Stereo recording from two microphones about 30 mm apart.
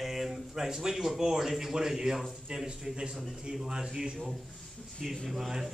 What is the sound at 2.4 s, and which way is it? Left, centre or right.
Speech, right.